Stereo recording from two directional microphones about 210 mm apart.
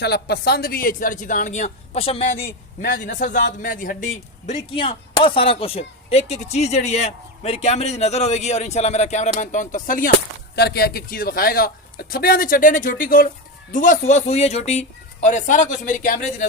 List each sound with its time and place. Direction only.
0.0 s a man's voice: 50° left (ahead or behind)